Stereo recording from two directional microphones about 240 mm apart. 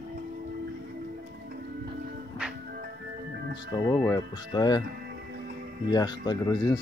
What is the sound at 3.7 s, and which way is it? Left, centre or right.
Speech, centre.